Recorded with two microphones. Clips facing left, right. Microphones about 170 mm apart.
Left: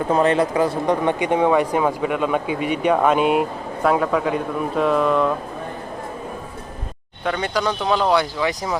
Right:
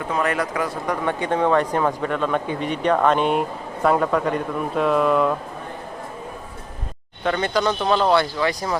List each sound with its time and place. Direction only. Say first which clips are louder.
0.1 s speech: left 5 dB; 25° left (ahead or behind)
1.2 s speech: right 1 dB; 15° left (ahead or behind); by 5.3 s centre (ahead or behind)
7.3 s speech: right 1 dB; 5° left (ahead or behind)